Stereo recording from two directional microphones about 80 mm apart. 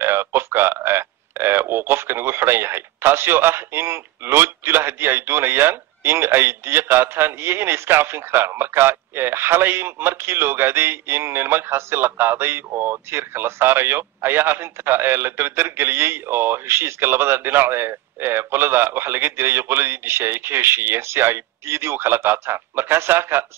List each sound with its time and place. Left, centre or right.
0.0 s speech: right